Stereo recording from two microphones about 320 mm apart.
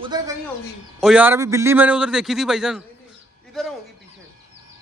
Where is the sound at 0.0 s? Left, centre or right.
Centre.